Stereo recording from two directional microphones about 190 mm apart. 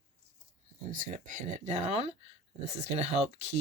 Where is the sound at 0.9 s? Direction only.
45° right (ahead or behind).